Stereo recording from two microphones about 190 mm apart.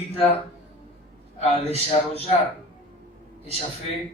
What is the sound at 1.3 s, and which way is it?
Speech, 35° left (ahead or behind).